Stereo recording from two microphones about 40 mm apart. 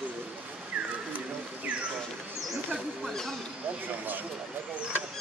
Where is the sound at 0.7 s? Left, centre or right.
Right.